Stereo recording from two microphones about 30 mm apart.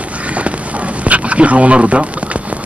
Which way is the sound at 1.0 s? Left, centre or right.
Right.